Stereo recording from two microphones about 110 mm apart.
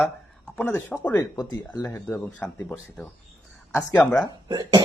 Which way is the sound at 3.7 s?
10° left (ahead or behind).